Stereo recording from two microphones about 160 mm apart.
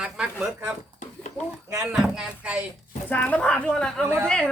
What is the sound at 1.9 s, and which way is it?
Speech, 5° right (ahead or behind).